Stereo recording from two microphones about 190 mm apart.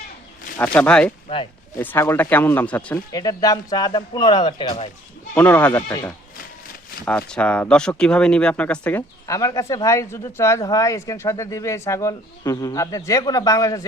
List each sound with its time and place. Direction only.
0.6 s speech: 5° left (ahead or behind); by 4.9 s 25° left (ahead or behind)
5.3 s speech: 10° left (ahead or behind)